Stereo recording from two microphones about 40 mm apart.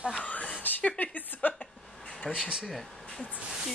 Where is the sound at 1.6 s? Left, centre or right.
Centre.